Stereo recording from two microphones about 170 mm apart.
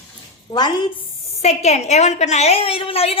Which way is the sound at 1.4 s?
40° left (ahead or behind).